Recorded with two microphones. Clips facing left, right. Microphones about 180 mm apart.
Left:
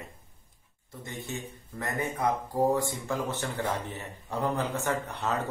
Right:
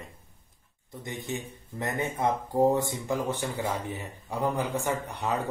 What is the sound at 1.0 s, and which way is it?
A man's voice, 15° right (ahead or behind).